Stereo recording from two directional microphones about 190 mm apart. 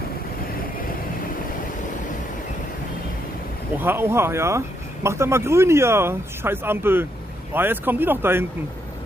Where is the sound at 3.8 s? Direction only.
10° right (ahead or behind).